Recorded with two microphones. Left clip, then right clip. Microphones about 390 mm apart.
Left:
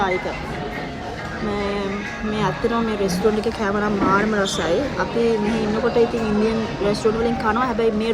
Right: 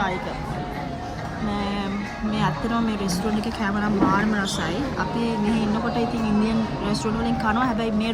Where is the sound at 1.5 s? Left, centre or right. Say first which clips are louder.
Left 5 dB; centre.